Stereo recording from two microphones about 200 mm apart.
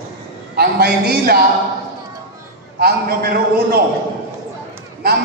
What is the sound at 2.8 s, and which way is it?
Speech, 50° right (ahead or behind).